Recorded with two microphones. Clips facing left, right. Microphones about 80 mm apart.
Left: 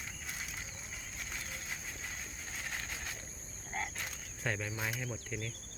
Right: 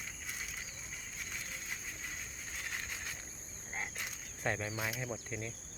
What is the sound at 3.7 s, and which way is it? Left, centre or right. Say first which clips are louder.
Cricket: left 2 dB; centre.